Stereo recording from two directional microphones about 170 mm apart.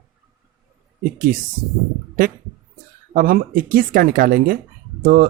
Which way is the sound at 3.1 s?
60° right (ahead or behind).